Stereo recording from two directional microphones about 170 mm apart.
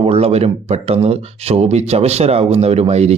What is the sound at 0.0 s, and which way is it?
Speech, 35° right (ahead or behind).